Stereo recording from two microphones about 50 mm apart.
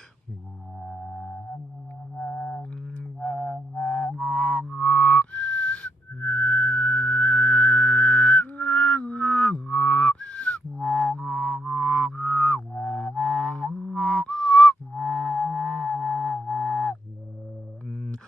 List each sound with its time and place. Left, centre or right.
0.8 s music: centre
3.0 s music: left
13.8 s a sound: left
15.4 s music: left